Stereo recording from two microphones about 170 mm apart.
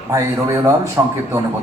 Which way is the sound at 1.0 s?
15° right (ahead or behind).